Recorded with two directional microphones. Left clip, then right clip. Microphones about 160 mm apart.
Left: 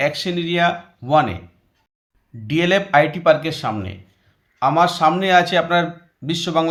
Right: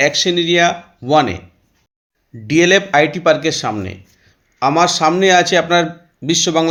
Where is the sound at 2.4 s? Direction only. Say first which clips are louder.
Right 6 dB; 20° right (ahead or behind).